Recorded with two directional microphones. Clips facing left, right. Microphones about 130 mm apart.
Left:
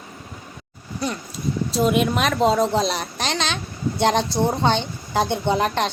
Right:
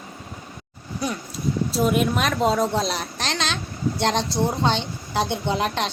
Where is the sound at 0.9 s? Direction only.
Centre (ahead or behind).